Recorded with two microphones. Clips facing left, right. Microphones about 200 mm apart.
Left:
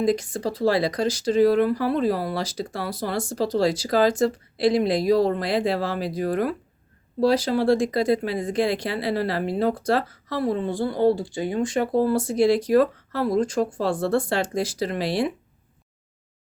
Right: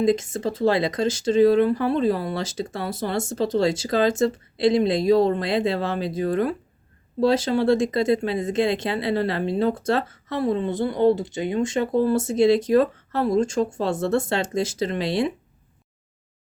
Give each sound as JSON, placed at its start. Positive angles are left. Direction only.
{"t": 0.0, "sound": "speech", "side_deg": -25}